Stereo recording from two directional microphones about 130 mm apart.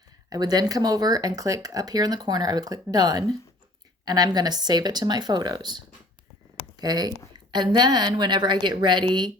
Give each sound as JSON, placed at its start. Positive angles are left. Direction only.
{"t": 0.3, "sound": "a woman's voice", "side_deg": -30}